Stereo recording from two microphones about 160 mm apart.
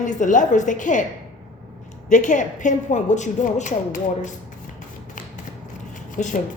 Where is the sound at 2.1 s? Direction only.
50° left (ahead or behind).